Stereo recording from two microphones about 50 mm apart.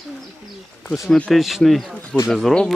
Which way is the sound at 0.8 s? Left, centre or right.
Centre.